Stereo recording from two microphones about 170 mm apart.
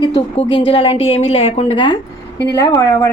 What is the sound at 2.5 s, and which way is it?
Speech, 15° left (ahead or behind).